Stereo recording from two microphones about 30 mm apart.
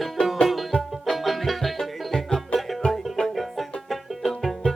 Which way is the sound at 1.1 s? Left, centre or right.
Centre.